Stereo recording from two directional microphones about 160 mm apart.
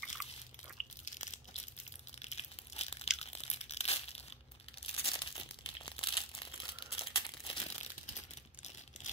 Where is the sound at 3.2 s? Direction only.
40° left (ahead or behind).